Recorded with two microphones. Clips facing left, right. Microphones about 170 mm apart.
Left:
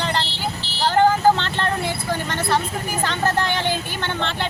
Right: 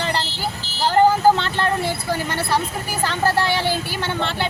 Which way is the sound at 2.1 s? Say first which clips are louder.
Left 1 dB; 10° right (ahead or behind).